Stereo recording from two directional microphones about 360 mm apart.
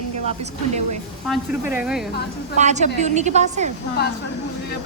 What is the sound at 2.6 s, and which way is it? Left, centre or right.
A woman's voice, centre.